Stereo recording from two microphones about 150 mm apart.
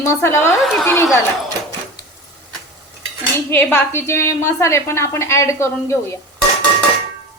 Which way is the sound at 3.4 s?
15° left (ahead or behind).